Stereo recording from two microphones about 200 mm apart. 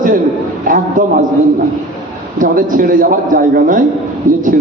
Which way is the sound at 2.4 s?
45° right (ahead or behind).